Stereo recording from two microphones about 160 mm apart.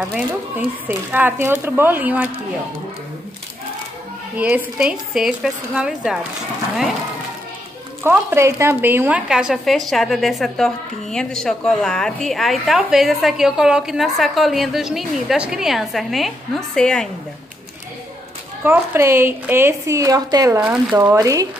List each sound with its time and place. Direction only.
0.1 s speech: 10° right (ahead or behind)
4.4 s speech: 10° right (ahead or behind)
8.0 s speech: 15° right (ahead or behind); by 17.1 s 5° left (ahead or behind)
18.6 s speech: 15° right (ahead or behind)